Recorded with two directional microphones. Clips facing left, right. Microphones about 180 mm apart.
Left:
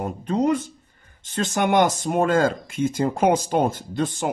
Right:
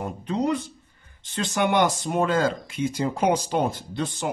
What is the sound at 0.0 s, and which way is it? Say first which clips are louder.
Speech: left 4 dB; 45° left (ahead or behind).